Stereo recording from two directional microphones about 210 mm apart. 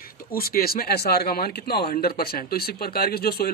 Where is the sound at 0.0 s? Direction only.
45° left (ahead or behind).